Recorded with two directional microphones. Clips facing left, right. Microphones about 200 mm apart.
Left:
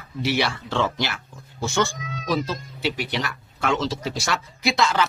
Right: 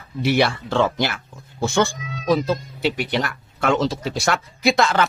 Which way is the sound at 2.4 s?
55° right (ahead or behind).